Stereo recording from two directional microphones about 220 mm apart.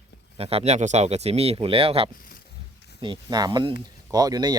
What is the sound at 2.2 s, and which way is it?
Pig, 40° left (ahead or behind).